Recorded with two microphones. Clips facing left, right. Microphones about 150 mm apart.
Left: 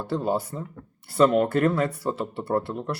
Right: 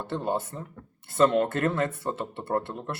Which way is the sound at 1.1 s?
25° right (ahead or behind).